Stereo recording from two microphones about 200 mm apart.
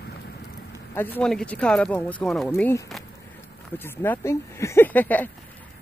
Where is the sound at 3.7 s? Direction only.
10° left (ahead or behind).